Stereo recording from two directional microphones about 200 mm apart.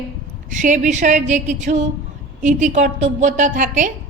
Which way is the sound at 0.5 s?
40° right (ahead or behind).